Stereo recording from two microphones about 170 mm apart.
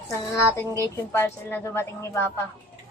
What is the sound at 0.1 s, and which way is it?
A woman's voice, 15° left (ahead or behind).